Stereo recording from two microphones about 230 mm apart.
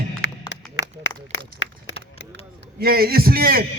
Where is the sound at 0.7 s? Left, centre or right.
Left.